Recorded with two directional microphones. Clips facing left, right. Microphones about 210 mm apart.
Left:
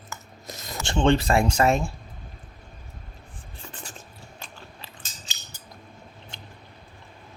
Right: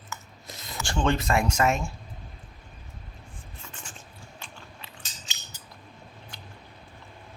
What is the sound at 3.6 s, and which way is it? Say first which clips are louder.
Writing: left 5 dB; 35° left (ahead or behind).